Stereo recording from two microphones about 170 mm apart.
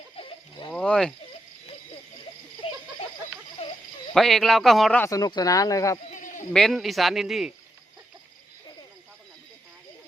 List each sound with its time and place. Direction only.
0.2 s a sound: 30° left (ahead or behind)
0.7 s speech: 5° left (ahead or behind)
2.6 s a sound: 35° left (ahead or behind)
4.1 s speech: centre (ahead or behind)
5.0 s speech: 20° left (ahead or behind)
6.1 s bleat: 50° left (ahead or behind)
6.5 s speech: centre (ahead or behind)